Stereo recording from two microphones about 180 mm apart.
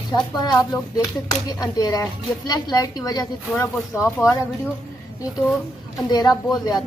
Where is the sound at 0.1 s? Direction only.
20° left (ahead or behind).